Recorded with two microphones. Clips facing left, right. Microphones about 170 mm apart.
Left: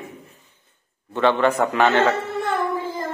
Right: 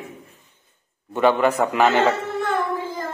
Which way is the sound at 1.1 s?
10° right (ahead or behind).